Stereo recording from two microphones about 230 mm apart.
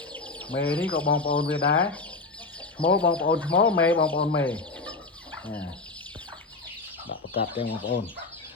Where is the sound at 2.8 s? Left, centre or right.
Left.